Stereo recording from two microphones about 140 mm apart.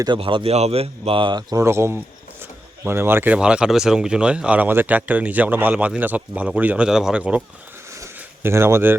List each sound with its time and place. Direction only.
0.2 s speech: 40° right (ahead or behind)
1.6 s a man's voice: 20° right (ahead or behind)
8.0 s a sound: 20° right (ahead or behind)